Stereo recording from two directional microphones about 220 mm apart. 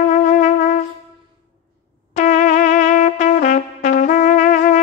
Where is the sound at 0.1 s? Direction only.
35° left (ahead or behind).